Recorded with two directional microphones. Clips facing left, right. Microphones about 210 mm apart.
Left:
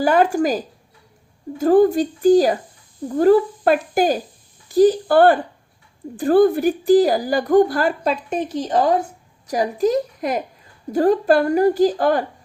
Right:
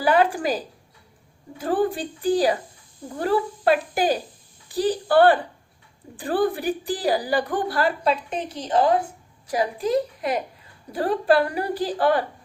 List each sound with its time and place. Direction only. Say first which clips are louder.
0.0 s a woman's voice: left 4 dB; 45° left (ahead or behind)